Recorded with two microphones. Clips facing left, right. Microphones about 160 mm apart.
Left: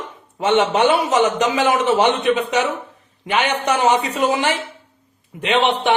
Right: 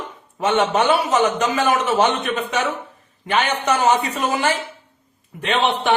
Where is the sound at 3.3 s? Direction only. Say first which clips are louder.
Left 1 dB; 15° left (ahead or behind).